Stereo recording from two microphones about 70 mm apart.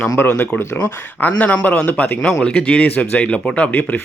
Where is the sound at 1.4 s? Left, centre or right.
Left.